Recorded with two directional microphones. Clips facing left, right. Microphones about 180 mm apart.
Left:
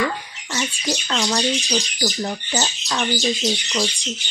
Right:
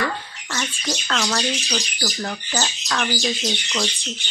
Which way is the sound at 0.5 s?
15° left (ahead or behind).